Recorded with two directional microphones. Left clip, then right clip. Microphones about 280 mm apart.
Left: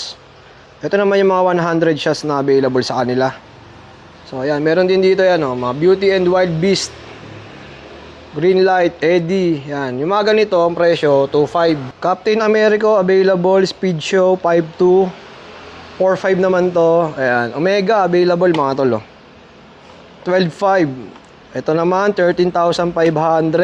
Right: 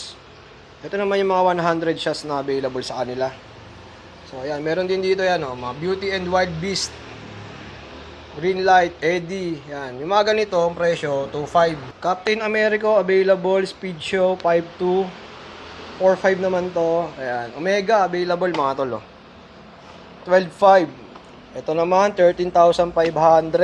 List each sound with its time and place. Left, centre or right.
0.8 s speech: left
4.4 s a man's voice: left
8.4 s a man's voice: left
16.0 s speech: left
20.2 s a man's voice: left